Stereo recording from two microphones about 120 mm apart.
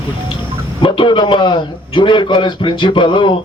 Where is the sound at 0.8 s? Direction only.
45° left (ahead or behind).